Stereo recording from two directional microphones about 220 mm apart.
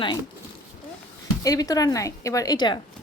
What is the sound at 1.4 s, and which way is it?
A woman's voice, 15° left (ahead or behind).